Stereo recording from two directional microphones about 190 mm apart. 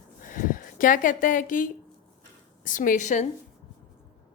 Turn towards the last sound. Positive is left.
turn(degrees=40)  # may be behind; listen again after turning